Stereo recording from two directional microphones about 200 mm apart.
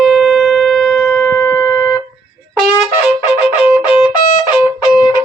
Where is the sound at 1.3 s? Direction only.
15° left (ahead or behind).